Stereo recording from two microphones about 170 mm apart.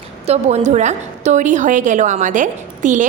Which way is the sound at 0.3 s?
40° right (ahead or behind).